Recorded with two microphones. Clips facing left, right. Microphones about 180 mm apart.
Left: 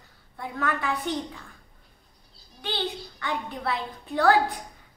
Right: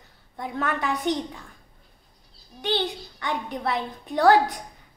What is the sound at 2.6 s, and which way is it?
A woman's voice, 20° right (ahead or behind).